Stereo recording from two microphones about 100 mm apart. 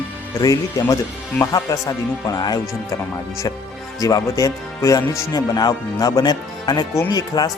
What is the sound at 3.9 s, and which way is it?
Speech, 35° left (ahead or behind).